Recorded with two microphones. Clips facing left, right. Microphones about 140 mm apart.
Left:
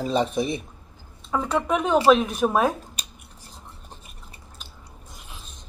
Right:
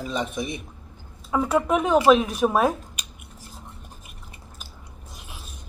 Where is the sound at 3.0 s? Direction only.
35° left (ahead or behind).